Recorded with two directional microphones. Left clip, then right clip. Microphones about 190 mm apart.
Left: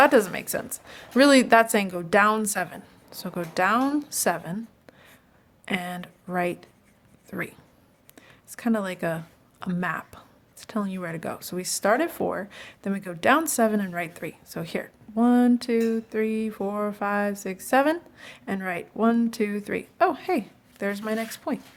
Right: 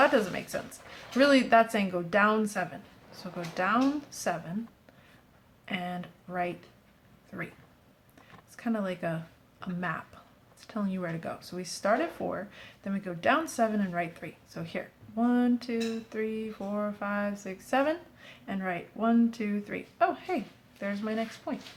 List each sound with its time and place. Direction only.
0.0 s speech: 45° left (ahead or behind)
5.6 s speech: 50° left (ahead or behind)